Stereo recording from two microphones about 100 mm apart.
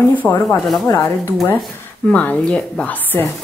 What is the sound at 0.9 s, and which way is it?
Speech, 30° left (ahead or behind).